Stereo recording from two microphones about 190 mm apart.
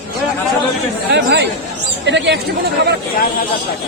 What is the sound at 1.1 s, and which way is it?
Speech, 65° right (ahead or behind).